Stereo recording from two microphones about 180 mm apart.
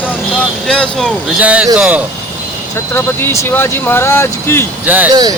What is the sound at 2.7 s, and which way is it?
Speech, 15° left (ahead or behind).